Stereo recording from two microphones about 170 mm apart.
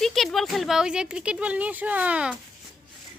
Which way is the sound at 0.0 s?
Centre (ahead or behind).